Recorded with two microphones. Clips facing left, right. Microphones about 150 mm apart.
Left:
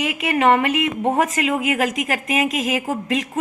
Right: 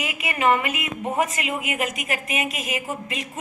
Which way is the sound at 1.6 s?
90° left.